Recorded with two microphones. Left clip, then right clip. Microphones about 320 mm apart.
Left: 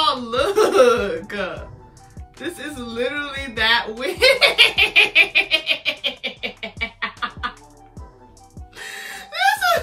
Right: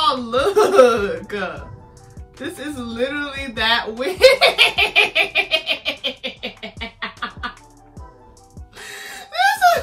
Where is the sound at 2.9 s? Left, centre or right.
Centre.